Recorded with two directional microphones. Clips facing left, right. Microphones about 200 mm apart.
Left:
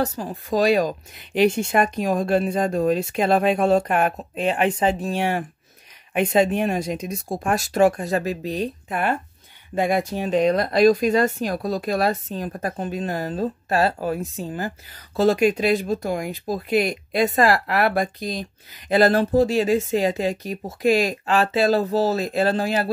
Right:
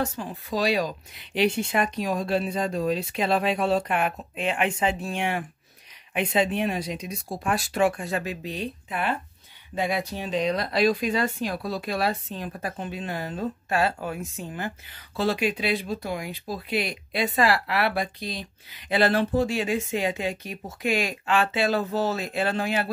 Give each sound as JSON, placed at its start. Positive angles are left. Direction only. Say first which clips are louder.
{"t": 0.0, "sound": "speech", "louder": "left 4 dB", "side_deg": 40}